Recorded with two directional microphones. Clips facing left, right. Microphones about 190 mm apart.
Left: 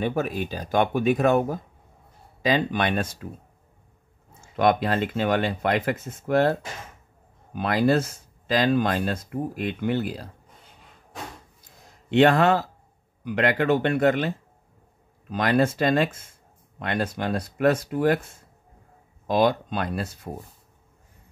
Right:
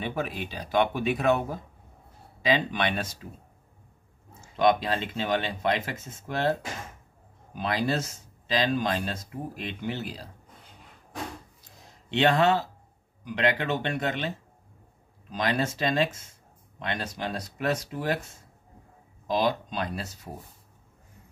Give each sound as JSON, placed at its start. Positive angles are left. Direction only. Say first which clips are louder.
{"t": 0.0, "sound": "speech", "louder": "left 6 dB", "side_deg": 45}
{"t": 4.3, "sound": "speech", "louder": "left 2 dB", "side_deg": 55}
{"t": 7.5, "sound": "speech", "louder": "left 6 dB", "side_deg": 55}
{"t": 12.1, "sound": "speech", "louder": "left 4 dB", "side_deg": 55}
{"t": 19.2, "sound": "speech", "louder": "left 5 dB", "side_deg": 55}